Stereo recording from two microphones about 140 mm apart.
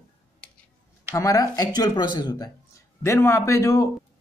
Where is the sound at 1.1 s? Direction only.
25° left (ahead or behind).